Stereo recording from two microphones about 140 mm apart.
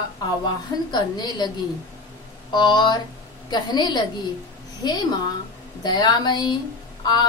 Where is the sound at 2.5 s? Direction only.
35° left (ahead or behind).